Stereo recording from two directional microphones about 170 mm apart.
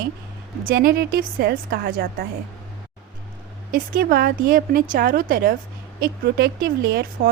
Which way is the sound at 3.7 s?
65° right (ahead or behind).